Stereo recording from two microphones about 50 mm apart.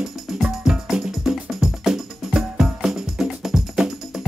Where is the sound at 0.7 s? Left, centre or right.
Centre.